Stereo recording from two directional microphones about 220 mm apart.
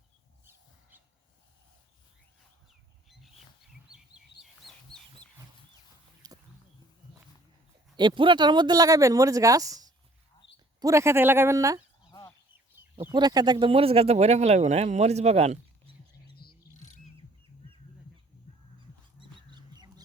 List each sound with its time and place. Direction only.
0.4 s a sound: 10° right (ahead or behind)
4.6 s chicken: centre (ahead or behind)
6.2 s a sound: 20° right (ahead or behind)
7.9 s speech: 20° right (ahead or behind)
13.1 s speech: 20° right (ahead or behind)
16.4 s chirp: 90° left
16.7 s bird: 35° left (ahead or behind)
19.2 s bird: 20° right (ahead or behind)